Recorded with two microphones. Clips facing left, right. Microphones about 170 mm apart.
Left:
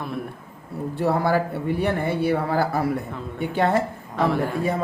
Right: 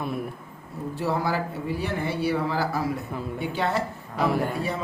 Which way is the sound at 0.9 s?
55° left (ahead or behind).